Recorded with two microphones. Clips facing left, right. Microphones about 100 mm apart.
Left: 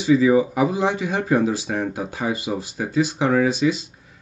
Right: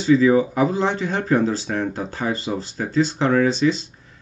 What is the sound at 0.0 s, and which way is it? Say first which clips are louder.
Speech: right 1 dB; 10° left (ahead or behind).